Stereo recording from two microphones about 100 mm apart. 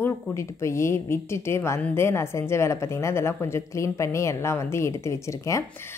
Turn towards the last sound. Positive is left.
turn(degrees=30)  # may be behind; listen again after turning